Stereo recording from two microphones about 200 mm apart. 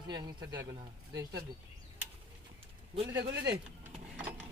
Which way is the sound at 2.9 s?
25° right (ahead or behind).